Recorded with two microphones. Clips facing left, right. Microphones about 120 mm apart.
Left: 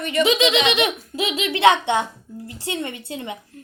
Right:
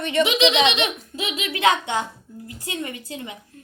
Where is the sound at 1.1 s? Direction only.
35° left (ahead or behind).